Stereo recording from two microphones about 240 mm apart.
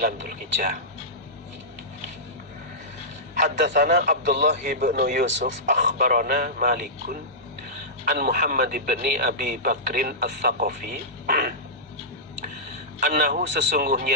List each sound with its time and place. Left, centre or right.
0.0 s speech: right
3.4 s speech: right
8.2 s speech: right
13.0 s speech: right